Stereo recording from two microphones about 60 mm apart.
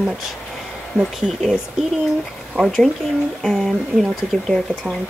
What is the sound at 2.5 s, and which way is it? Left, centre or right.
Speech, right.